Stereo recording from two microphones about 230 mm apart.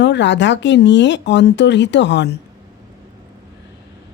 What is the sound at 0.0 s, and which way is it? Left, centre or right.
Speech, left.